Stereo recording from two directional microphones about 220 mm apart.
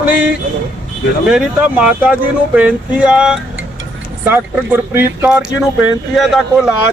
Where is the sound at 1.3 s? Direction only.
5° right (ahead or behind).